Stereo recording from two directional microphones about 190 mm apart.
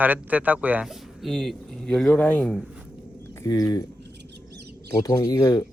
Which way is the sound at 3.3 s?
15° left (ahead or behind).